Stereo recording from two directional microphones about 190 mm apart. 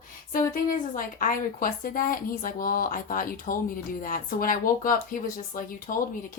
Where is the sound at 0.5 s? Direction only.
45° left (ahead or behind).